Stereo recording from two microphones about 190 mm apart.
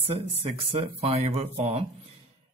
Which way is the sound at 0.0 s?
30° right (ahead or behind).